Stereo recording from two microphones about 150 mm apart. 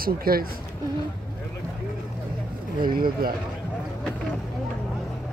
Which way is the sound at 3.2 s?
75° right (ahead or behind).